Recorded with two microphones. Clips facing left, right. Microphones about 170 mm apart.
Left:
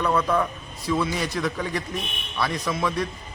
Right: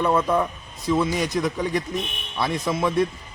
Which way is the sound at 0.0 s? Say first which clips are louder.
Right 2 dB; 20° right (ahead or behind).